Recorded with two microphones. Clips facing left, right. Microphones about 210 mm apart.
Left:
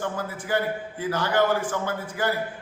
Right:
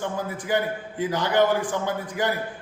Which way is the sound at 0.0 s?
15° right (ahead or behind).